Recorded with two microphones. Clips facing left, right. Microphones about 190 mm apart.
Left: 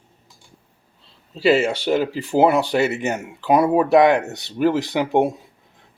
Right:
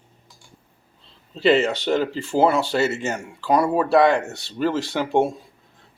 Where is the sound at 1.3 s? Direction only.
5° left (ahead or behind).